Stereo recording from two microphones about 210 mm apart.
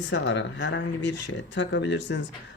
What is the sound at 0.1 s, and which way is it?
Speech, 60° left (ahead or behind).